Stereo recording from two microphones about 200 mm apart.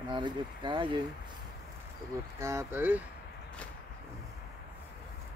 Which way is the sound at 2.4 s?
10° right (ahead or behind).